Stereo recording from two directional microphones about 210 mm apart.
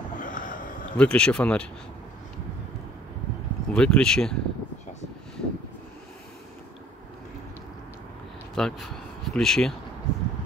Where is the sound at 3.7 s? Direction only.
5° left (ahead or behind).